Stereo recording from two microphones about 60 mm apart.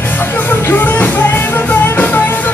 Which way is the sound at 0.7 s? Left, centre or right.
Left.